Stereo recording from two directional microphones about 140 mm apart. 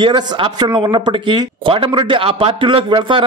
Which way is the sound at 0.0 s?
35° right (ahead or behind).